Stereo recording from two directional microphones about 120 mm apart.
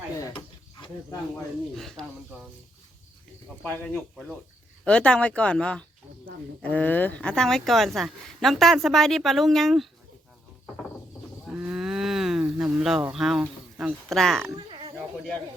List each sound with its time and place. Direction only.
1.7 s speech: centre (ahead or behind)
3.6 s speech: 10° left (ahead or behind)
11.4 s speech: 10° right (ahead or behind)
14.7 s insect: 40° right (ahead or behind)